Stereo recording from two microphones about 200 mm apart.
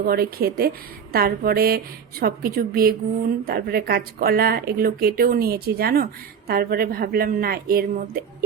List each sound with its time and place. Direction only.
0.0 s a woman's voice: 50° right (ahead or behind)